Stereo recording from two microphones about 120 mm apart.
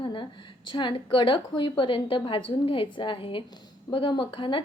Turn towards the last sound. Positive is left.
turn(degrees=45)  # may be behind; listen again after turning